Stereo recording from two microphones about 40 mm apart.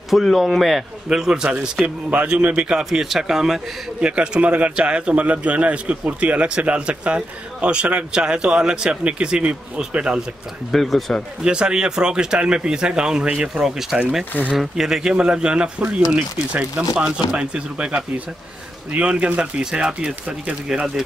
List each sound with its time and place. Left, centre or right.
0.1 s speech: centre
1.1 s speech: centre
2.9 s speech: centre
4.0 s speech: right
4.4 s a man's voice: right; by 8.9 s centre
9.0 s a man's voice: right
10.7 s speech: centre
11.4 s a man's voice: right
19.6 s speech: centre